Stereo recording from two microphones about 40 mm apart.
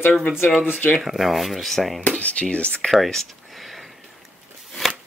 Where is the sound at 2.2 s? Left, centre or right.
Left.